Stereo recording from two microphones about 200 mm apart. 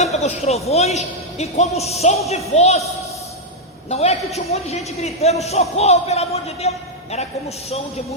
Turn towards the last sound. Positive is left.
turn(degrees=30)  # may be behind; listen again after turning